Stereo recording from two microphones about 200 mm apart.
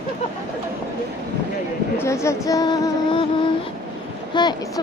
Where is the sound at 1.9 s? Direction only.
15° left (ahead or behind).